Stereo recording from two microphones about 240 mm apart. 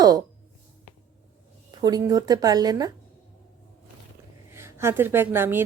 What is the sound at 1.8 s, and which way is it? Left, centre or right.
A woman's voice, centre.